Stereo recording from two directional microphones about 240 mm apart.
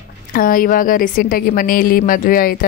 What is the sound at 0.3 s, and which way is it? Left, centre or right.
Speech, left.